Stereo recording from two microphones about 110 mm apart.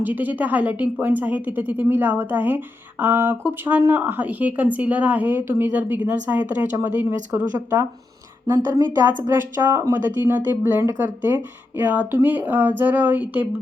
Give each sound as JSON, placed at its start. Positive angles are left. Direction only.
{"t": 0.0, "sound": "speech", "side_deg": -15}
{"t": 9.3, "sound": "speech", "side_deg": -20}